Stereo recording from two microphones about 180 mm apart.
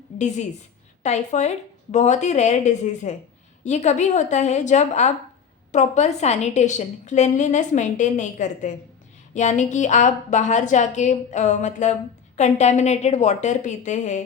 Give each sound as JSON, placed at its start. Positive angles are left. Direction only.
{"t": 0.2, "sound": "a woman's voice", "side_deg": 40}